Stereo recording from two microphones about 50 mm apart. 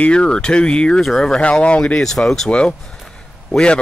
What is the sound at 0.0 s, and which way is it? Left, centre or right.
Speech, centre.